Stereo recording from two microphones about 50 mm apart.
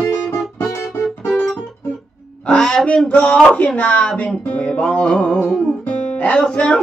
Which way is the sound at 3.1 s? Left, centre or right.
Left.